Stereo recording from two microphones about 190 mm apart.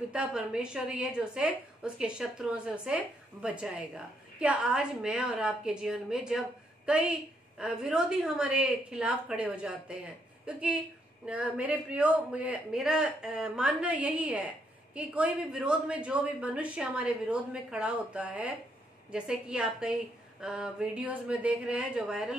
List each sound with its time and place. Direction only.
0.1 s a woman's voice: 5° right (ahead or behind)